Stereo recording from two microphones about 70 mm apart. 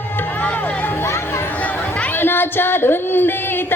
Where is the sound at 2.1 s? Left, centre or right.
Left.